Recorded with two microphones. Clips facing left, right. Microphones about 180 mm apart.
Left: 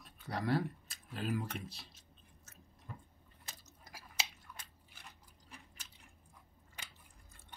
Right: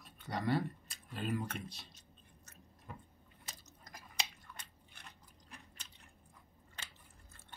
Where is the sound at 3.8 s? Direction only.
5° left (ahead or behind).